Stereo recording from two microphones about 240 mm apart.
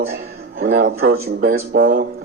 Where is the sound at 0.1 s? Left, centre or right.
Right.